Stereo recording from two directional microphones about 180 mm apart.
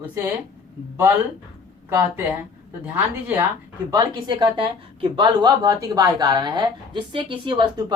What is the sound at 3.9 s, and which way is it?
Speech, 25° right (ahead or behind).